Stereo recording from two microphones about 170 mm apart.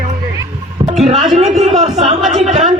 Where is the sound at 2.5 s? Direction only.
40° right (ahead or behind).